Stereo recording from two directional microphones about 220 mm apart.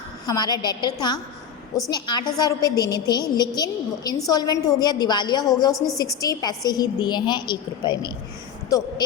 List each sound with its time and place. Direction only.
0.3 s a woman's voice: 20° left (ahead or behind)
5.7 s a woman's voice: centre (ahead or behind)
6.0 s a woman's voice: 15° left (ahead or behind)